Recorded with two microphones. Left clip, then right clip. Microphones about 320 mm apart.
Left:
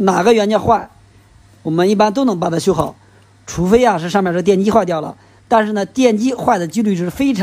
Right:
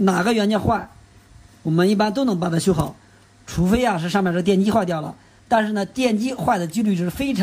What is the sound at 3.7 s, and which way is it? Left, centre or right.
Speech, centre.